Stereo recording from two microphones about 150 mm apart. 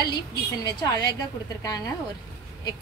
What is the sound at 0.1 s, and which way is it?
A woman's voice, 30° left (ahead or behind).